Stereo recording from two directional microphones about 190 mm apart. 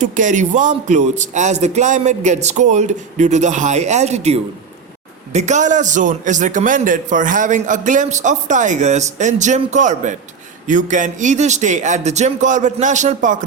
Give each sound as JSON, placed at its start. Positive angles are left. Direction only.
{"t": 0.0, "sound": "a man's voice", "side_deg": -40}